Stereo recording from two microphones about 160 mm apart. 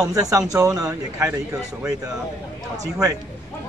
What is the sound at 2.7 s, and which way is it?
Speech, 20° right (ahead or behind).